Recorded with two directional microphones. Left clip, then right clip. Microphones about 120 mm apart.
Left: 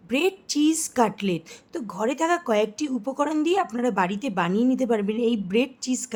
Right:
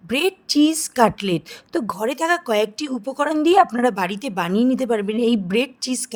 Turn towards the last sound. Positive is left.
turn(degrees=-50)  # may be behind; listen again after turning